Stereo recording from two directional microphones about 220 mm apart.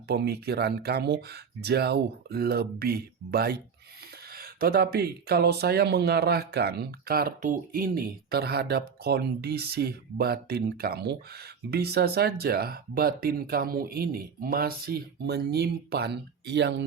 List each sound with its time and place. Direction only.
0.1 s speech: 45° right (ahead or behind)